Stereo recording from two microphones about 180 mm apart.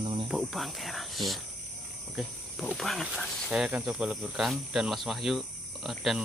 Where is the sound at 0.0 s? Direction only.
30° right (ahead or behind).